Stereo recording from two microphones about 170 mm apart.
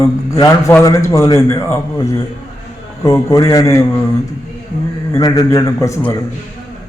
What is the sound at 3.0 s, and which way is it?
Speech, 20° left (ahead or behind).